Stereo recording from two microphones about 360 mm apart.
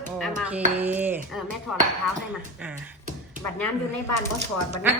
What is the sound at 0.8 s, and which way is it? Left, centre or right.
Dishes, centre.